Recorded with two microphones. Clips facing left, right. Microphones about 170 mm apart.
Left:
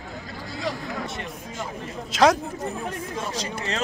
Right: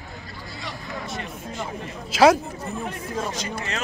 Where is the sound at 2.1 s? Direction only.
5° right (ahead or behind).